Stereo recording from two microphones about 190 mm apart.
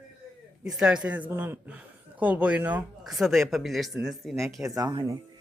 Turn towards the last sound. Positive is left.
turn(degrees=-20)  # may be behind; listen again after turning